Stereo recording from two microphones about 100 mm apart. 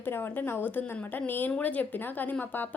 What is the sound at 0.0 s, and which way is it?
Speech, 20° left (ahead or behind).